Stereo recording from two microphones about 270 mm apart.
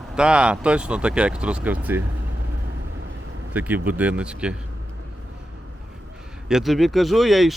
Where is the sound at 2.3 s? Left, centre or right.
Right.